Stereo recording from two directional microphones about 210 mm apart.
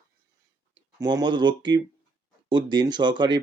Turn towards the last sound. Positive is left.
turn(degrees=-20)  # may be behind; listen again after turning